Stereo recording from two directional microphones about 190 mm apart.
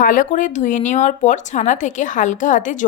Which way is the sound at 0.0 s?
45° left (ahead or behind).